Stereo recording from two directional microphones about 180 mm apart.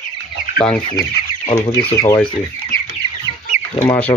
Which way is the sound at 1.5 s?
25° left (ahead or behind).